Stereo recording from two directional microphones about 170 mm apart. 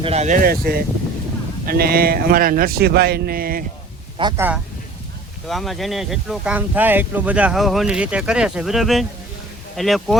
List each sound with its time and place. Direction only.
0.0 s a man's voice: 40° right (ahead or behind); by 3.6 s 60° right (ahead or behind)
4.4 s speech: 10° right (ahead or behind)
5.5 s speech: centre (ahead or behind)